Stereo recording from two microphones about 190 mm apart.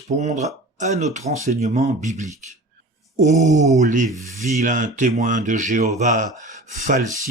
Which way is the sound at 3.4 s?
40° right (ahead or behind).